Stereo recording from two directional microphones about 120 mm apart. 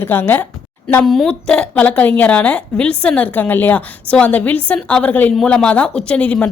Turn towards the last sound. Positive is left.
turn(degrees=10)  # may be behind; listen again after turning